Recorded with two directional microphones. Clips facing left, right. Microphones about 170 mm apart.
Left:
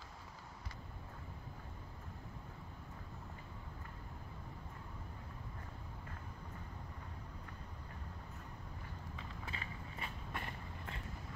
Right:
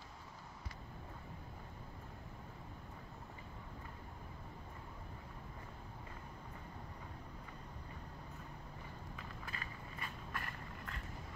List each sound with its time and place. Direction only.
9.5 s vehicle: 25° left (ahead or behind)